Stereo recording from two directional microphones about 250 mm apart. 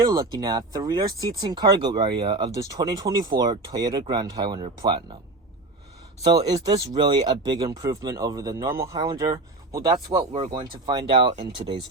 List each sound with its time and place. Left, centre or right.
0.0 s speech: centre
6.2 s speech: centre